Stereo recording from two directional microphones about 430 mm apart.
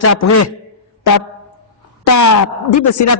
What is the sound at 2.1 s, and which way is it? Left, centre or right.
Speech, left.